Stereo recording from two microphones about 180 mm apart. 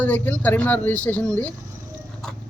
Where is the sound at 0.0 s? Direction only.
10° left (ahead or behind).